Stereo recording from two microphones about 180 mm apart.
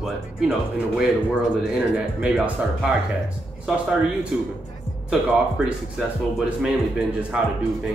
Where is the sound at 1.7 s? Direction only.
5° right (ahead or behind).